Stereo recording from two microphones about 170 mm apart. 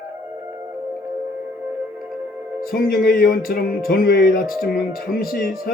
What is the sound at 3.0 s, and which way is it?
Music, 60° left (ahead or behind).